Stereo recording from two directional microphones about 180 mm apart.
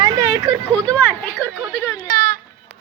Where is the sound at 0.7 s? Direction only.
10° left (ahead or behind).